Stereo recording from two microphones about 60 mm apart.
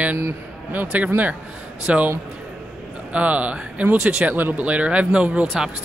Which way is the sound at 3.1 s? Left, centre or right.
Right.